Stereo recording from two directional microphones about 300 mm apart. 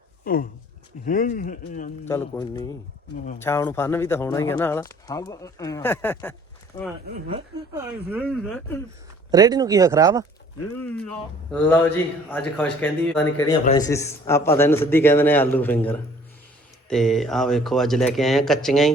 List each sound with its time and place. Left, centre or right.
0.3 s speech: left
2.0 s speech: centre
7.3 s speech: centre
8.1 s speech: centre
9.3 s speech: centre
10.8 s speech: centre